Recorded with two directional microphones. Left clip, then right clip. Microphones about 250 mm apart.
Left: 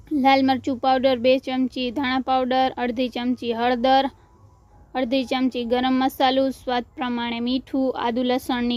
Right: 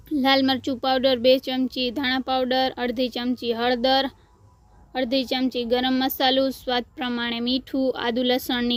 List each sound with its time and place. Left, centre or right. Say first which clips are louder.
0.2 s speech: left 2 dB; centre